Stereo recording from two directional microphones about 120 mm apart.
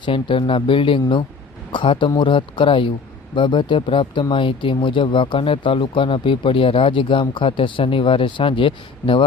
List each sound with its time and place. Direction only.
0.0 s speech: 45° left (ahead or behind)